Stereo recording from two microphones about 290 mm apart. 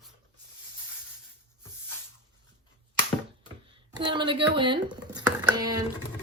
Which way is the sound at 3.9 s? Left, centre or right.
Centre.